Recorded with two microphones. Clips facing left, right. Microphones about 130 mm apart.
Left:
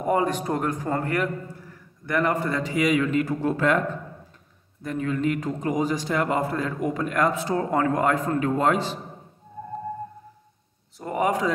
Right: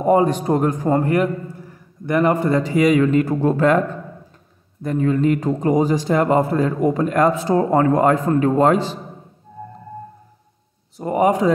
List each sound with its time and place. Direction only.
0.0 s a man's voice: 25° right (ahead or behind)
4.8 s a man's voice: 35° right (ahead or behind)
11.0 s a man's voice: 25° right (ahead or behind)